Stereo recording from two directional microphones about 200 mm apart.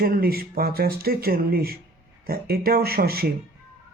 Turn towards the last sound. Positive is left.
turn(degrees=-50)  # may be behind; listen again after turning